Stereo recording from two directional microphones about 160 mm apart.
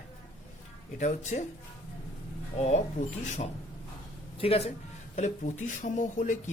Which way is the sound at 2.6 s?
40° left (ahead or behind).